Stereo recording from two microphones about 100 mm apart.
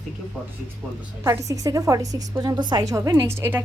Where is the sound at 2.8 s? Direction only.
35° right (ahead or behind).